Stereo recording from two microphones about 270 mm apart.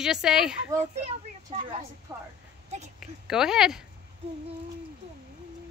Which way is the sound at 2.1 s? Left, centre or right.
Centre.